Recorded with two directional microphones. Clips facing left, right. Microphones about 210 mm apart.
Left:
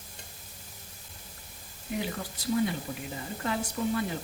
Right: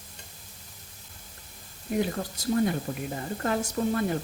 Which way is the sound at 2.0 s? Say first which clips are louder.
Right 7 dB; 45° right (ahead or behind).